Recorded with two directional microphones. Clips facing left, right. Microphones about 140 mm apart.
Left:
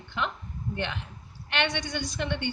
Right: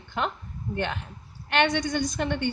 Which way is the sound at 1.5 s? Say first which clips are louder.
Right 6 dB; 45° right (ahead or behind).